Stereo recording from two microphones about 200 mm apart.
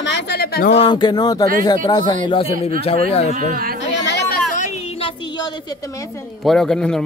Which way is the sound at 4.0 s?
60° left (ahead or behind).